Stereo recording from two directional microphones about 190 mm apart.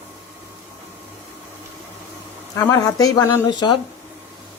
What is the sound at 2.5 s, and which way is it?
Speech, 15° left (ahead or behind).